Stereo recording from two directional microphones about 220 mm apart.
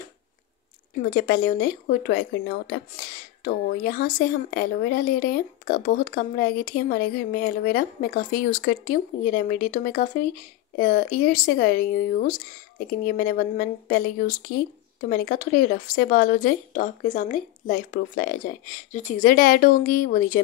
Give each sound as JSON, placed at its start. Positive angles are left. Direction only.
{"t": 0.9, "sound": "a woman's voice", "side_deg": 40}